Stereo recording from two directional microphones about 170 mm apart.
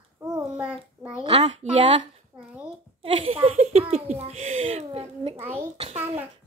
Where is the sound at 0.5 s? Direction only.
5° right (ahead or behind).